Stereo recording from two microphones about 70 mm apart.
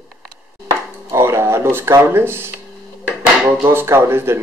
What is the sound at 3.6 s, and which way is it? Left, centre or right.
Speech, right.